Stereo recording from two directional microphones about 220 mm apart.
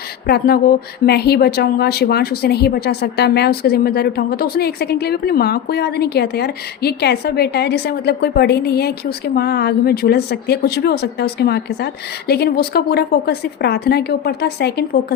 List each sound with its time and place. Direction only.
0.3 s speech: 45° left (ahead or behind)